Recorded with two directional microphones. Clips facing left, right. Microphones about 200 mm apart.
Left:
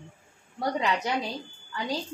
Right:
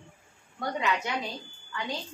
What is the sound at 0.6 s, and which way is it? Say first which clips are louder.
Speech: left 2 dB; 35° left (ahead or behind).